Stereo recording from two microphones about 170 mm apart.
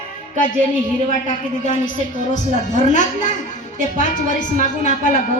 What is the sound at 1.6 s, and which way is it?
A woman's voice, 45° left (ahead or behind).